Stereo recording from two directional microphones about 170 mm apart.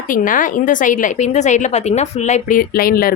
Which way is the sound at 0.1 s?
50° left (ahead or behind).